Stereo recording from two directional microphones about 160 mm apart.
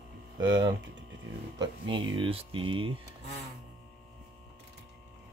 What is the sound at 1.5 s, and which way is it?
Speech, 30° right (ahead or behind).